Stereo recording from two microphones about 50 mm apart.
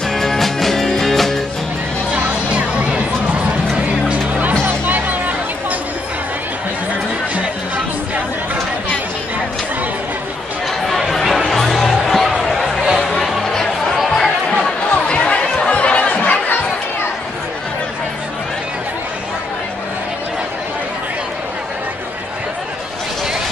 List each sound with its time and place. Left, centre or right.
0.1 s music: centre
2.1 s music: right
10.9 s chatter: centre
11.5 s music: centre
14.0 s chatter: centre; by 16.6 s left